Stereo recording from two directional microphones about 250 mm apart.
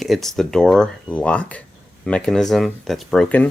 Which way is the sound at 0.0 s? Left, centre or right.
Centre.